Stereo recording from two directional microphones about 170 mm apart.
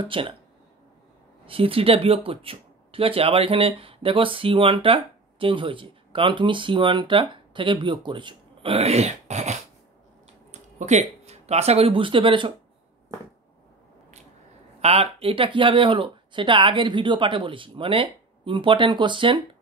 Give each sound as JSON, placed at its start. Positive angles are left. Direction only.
{"t": 0.0, "sound": "speech", "side_deg": -30}
{"t": 1.4, "sound": "speech", "side_deg": -35}
{"t": 14.8, "sound": "speech", "side_deg": -35}